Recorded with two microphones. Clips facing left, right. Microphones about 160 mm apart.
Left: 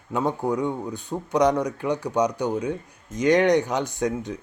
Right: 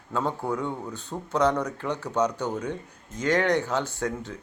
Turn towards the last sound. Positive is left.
turn(degrees=15)  # may be behind; listen again after turning